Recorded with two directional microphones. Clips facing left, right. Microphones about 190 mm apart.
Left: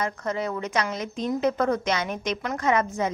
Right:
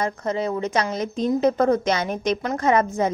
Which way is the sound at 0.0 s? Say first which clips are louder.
Right 4 dB; 25° right (ahead or behind).